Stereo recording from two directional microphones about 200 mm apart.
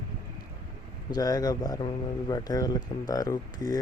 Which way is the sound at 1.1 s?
20° left (ahead or behind).